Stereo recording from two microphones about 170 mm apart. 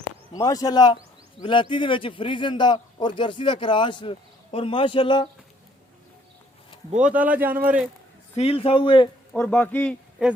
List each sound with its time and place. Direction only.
0.3 s a man's voice: 20° left (ahead or behind)
6.9 s speech: 5° right (ahead or behind)
8.4 s a man's voice: 35° left (ahead or behind)
9.3 s speech: 10° left (ahead or behind)
10.2 s speech: 5° right (ahead or behind)